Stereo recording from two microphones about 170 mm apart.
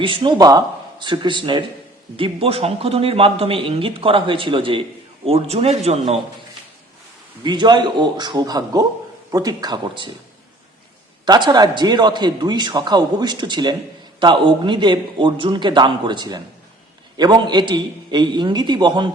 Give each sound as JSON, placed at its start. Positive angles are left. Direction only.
{"t": 0.0, "sound": "a man's voice", "side_deg": -30}
{"t": 7.4, "sound": "a man's voice", "side_deg": -25}
{"t": 11.3, "sound": "a man's voice", "side_deg": -25}